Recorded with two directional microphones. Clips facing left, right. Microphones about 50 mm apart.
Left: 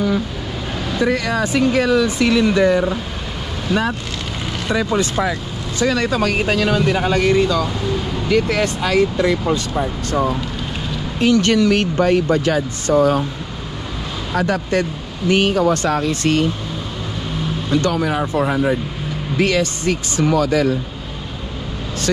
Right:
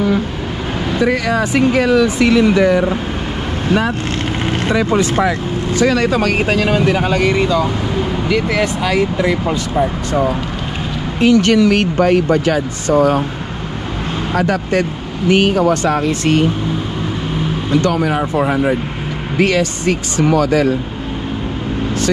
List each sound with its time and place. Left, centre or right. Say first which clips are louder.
1.1 s speech: right 3 dB; right
3.6 s speech: right 3 dB; right
11.1 s speech: right 4 dB; right
14.5 s speech: right 3 dB; right
18.0 s speech: right 3 dB; right
19.3 s speech: right 3 dB; right